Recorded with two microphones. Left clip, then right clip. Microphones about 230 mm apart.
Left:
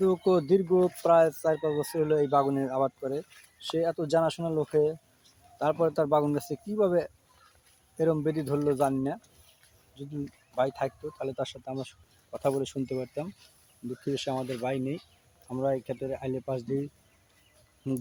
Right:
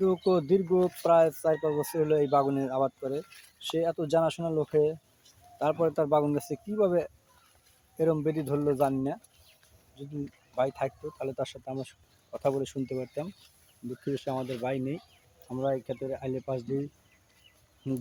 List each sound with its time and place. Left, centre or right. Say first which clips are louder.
0.0 s speech: left 1 dB; centre
14.3 s speech: left 1 dB; centre
14.6 s speech: left 1 dB; centre